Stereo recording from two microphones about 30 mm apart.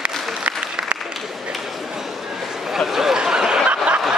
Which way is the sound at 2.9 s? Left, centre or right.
Centre.